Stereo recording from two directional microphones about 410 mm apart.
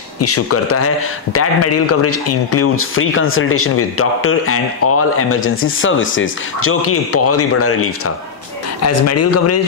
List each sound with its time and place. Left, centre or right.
0.2 s speech: left